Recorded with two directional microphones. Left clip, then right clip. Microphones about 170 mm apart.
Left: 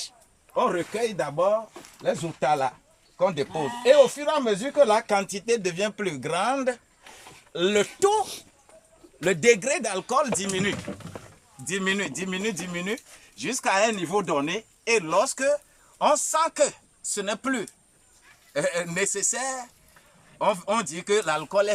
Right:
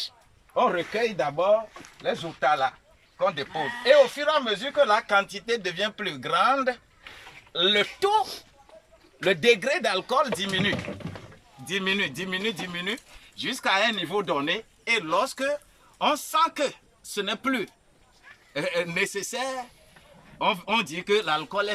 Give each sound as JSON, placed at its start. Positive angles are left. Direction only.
{"t": 0.5, "sound": "speech", "side_deg": 5}
{"t": 2.0, "sound": "speech", "side_deg": 15}
{"t": 2.5, "sound": "speech", "side_deg": 30}
{"t": 8.2, "sound": "speech", "side_deg": 0}